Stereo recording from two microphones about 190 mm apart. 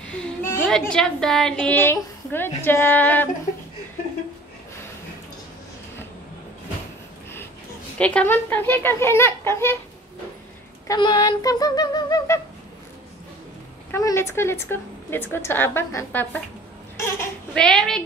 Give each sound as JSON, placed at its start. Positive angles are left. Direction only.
{"t": 0.0, "sound": "a woman's voice", "side_deg": 5}
{"t": 8.0, "sound": "a woman's voice", "side_deg": 5}
{"t": 10.9, "sound": "a sound", "side_deg": 20}
{"t": 13.9, "sound": "a woman's voice", "side_deg": 15}